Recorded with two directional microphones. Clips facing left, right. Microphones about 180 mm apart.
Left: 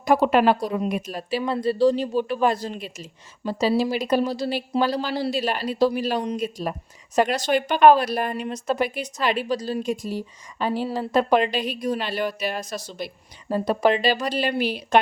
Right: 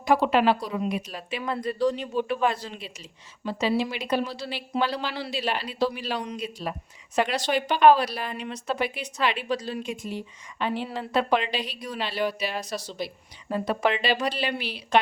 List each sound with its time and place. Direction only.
0.0 s speech: 45° left (ahead or behind)
1.4 s speech: 30° left (ahead or behind); by 15.0 s 45° left (ahead or behind)